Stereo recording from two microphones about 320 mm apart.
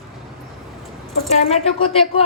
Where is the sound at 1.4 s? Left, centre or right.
Centre.